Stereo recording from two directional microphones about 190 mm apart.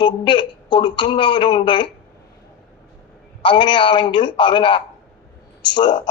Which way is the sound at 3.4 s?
25° left (ahead or behind).